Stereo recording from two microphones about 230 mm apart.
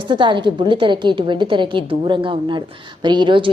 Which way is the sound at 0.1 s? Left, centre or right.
Right.